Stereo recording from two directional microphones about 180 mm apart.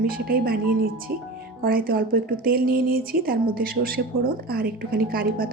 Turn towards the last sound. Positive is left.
turn(degrees=-55)  # may be behind; listen again after turning